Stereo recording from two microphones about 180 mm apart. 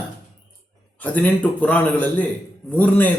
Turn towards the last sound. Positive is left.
turn(degrees=10)  # may be behind; listen again after turning